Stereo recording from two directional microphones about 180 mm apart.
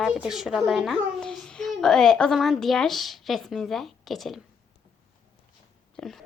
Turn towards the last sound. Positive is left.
turn(degrees=5)  # may be behind; listen again after turning